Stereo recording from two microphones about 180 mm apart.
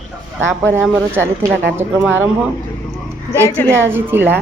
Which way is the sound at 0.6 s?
10° right (ahead or behind).